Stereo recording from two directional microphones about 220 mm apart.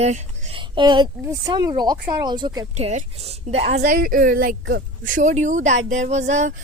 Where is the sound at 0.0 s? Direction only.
25° right (ahead or behind).